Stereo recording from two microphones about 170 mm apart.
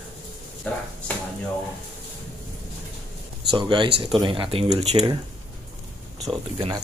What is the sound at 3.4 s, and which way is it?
Speech, 25° right (ahead or behind).